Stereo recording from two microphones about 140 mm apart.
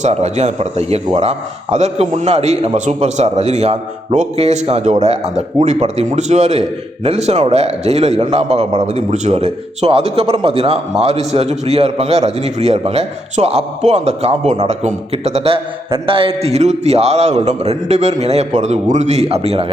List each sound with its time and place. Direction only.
0.0 s a man's voice: 55° right (ahead or behind)